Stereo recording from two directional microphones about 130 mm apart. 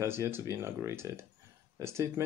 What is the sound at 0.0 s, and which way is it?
Speech, 20° right (ahead or behind).